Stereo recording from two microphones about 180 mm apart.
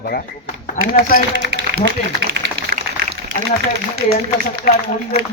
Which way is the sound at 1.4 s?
75° right (ahead or behind).